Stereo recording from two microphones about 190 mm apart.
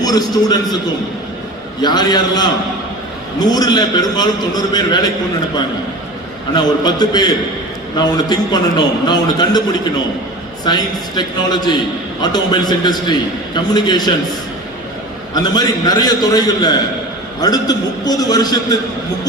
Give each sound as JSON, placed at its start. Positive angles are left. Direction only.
{"t": 0.0, "sound": "a man's voice", "side_deg": 20}
{"t": 1.8, "sound": "a man's voice", "side_deg": 20}
{"t": 6.5, "sound": "a man's voice", "side_deg": 20}
{"t": 10.7, "sound": "a man's voice", "side_deg": 20}
{"t": 15.4, "sound": "a man's voice", "side_deg": 20}